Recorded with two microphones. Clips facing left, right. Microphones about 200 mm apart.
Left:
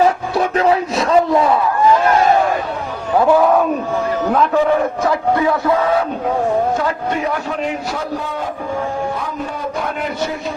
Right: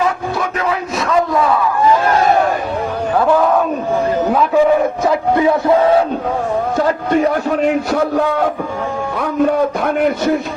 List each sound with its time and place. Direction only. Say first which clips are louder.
0.0 s a sound: left 3 dB; 30° left (ahead or behind)
3.3 s speech: left 1 dB; 5° left (ahead or behind)
4.3 s a man's voice: even; 10° right (ahead or behind)
5.0 s speech: right 3 dB; 20° right (ahead or behind)
7.9 s a man's voice: right 8 dB; 60° right (ahead or behind)
9.7 s a sound: right 6 dB; 55° right (ahead or behind)